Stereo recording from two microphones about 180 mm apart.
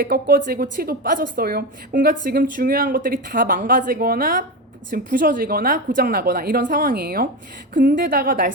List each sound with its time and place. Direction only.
0.0 s a woman's voice: 50° right (ahead or behind)